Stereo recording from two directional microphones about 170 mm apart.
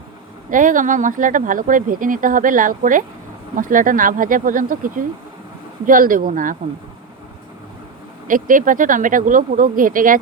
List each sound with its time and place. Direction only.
0.5 s speech: 50° right (ahead or behind)
8.3 s speech: 50° right (ahead or behind)